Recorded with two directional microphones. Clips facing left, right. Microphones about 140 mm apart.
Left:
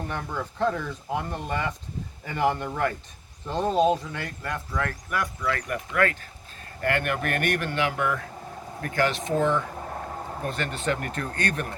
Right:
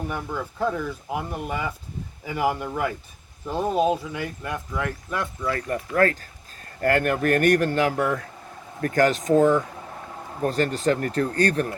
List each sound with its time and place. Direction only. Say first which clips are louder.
0.0 s speech: right 2 dB; 5° right (ahead or behind); by 11.7 s 35° right (ahead or behind)